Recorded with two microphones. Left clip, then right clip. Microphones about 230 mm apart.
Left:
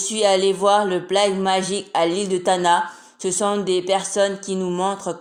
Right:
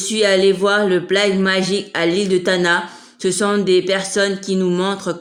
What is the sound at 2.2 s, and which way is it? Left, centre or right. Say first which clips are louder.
Speech: right 3 dB; centre.